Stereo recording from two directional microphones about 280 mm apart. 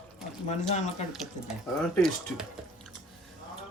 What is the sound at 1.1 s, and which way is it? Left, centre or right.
Speech, centre.